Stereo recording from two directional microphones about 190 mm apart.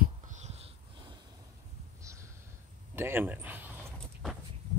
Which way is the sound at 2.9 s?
10° right (ahead or behind).